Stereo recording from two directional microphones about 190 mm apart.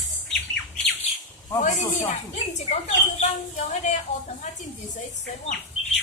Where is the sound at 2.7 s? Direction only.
35° left (ahead or behind).